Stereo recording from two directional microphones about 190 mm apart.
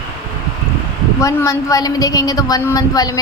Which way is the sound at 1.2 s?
15° left (ahead or behind).